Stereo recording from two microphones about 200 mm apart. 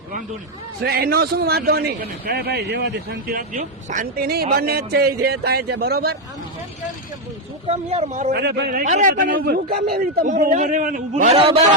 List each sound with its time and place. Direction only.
0.9 s a man's voice: 50° right (ahead or behind)
7.7 s speech: 30° right (ahead or behind)
8.3 s a man's voice: 55° right (ahead or behind); by 11.5 s 30° right (ahead or behind)